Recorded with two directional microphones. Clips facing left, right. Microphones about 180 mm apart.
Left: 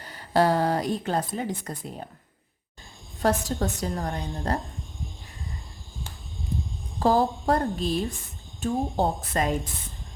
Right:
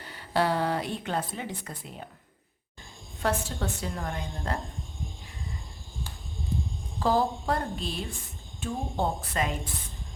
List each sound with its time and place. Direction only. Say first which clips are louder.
0.0 s a woman's voice: left 5 dB; 40° left (ahead or behind)
3.2 s a woman's voice: left 5 dB; 40° left (ahead or behind)
7.0 s a woman's voice: left 4 dB; 45° left (ahead or behind)